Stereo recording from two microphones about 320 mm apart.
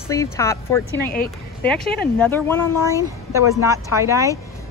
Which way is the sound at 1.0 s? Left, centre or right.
Left.